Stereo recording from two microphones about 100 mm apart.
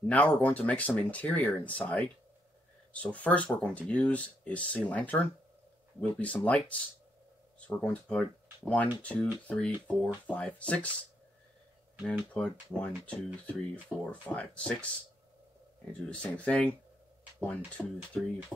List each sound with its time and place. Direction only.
0.0 s speech: 15° left (ahead or behind)
12.4 s speech: 15° left (ahead or behind)
13.9 s speech: centre (ahead or behind)
14.2 s speech: 15° left (ahead or behind)
16.1 s speech: 10° left (ahead or behind)